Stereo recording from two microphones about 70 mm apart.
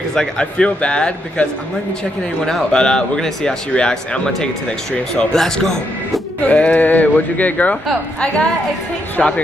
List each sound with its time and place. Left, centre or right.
0.1 s speech: centre
6.4 s speech: centre
9.2 s speech: centre